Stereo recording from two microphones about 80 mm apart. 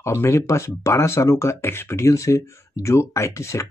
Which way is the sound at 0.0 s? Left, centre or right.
Left.